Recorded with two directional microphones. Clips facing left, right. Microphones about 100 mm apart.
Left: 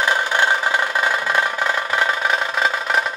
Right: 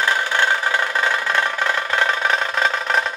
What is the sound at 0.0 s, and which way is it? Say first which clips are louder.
Music: left 1 dB; 15° left (ahead or behind).